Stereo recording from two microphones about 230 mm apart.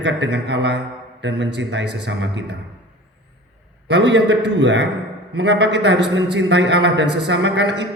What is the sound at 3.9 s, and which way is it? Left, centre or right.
A man's voice, right.